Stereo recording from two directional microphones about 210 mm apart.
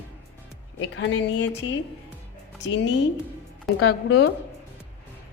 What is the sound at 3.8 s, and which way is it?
Speech, 90° left.